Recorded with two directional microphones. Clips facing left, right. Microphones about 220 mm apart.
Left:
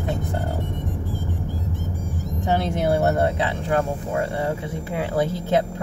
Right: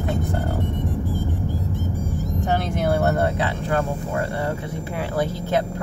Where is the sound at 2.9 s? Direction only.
20° left (ahead or behind).